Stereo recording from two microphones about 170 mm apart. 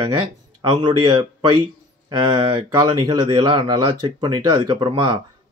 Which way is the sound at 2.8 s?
25° right (ahead or behind).